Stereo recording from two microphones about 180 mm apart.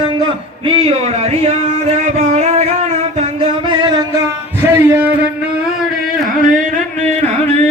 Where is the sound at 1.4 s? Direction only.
40° right (ahead or behind).